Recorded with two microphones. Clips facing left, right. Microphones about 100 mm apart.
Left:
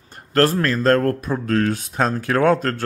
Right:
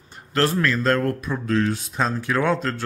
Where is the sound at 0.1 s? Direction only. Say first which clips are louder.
Left 4 dB; 45° left (ahead or behind).